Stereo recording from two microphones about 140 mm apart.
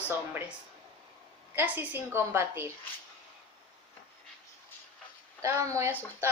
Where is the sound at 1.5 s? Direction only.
10° right (ahead or behind).